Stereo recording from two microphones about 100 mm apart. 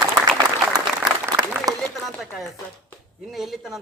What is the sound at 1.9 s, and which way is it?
A man's voice, centre (ahead or behind).